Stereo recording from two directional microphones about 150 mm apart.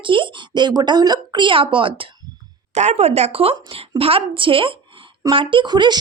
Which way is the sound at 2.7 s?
50° right (ahead or behind).